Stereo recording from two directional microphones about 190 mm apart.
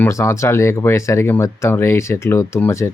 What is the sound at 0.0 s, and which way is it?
A child's voice, 15° left (ahead or behind).